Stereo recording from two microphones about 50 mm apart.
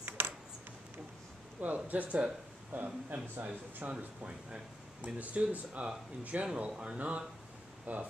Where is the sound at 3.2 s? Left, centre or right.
Right.